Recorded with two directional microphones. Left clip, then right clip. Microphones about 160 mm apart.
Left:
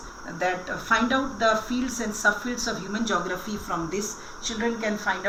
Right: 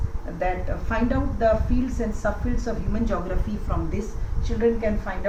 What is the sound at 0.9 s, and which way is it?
A woman's voice, 20° right (ahead or behind).